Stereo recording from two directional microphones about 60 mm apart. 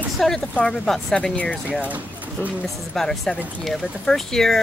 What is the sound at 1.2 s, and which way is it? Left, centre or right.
Speech, left.